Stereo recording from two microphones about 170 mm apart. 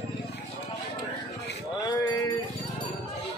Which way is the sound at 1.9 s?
20° left (ahead or behind).